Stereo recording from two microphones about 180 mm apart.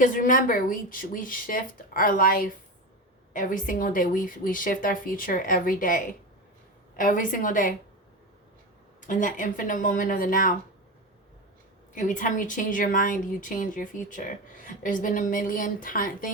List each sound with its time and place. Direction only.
0.0 s speech: 45° left (ahead or behind)
9.0 s speech: 45° left (ahead or behind)
11.9 s speech: 45° left (ahead or behind)